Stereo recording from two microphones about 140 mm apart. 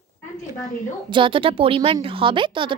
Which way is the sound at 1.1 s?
35° right (ahead or behind).